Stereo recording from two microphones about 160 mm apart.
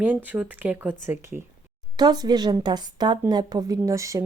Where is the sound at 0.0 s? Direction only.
10° right (ahead or behind).